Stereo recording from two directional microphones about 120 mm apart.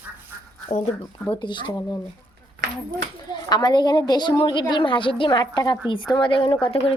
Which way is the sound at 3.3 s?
35° left (ahead or behind).